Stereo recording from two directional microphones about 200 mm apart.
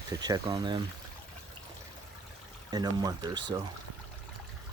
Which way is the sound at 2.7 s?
20° right (ahead or behind).